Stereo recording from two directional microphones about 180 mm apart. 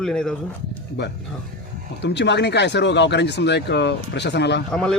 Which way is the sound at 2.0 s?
70° left (ahead or behind).